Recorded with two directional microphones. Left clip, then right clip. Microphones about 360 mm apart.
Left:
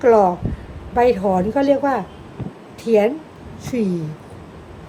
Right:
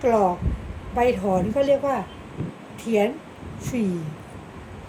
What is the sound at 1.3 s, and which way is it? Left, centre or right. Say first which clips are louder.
Speech: left 3 dB; centre.